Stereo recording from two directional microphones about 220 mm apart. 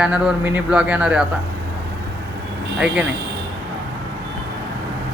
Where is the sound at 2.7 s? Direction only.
5° right (ahead or behind).